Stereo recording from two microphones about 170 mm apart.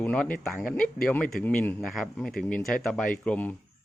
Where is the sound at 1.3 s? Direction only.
5° left (ahead or behind).